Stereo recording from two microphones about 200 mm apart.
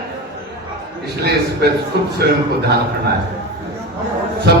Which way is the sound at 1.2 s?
55° right (ahead or behind).